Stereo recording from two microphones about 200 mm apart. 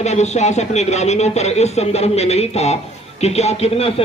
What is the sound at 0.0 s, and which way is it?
A man's voice, 35° left (ahead or behind).